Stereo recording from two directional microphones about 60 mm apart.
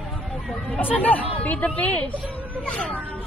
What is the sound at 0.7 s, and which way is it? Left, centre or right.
A woman's voice, left.